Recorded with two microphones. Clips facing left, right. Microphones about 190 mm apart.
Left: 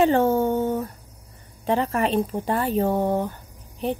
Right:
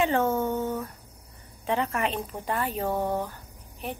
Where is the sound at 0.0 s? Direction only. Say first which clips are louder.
Left 6 dB; 35° left (ahead or behind).